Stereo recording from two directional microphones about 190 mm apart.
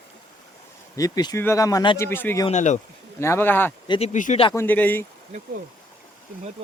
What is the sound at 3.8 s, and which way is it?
Speech, 25° left (ahead or behind).